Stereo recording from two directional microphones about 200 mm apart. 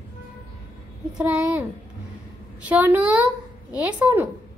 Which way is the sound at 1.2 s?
5° right (ahead or behind).